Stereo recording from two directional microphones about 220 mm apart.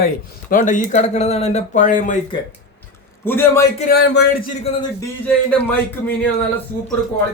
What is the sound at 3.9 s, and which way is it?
Speech, 45° left (ahead or behind).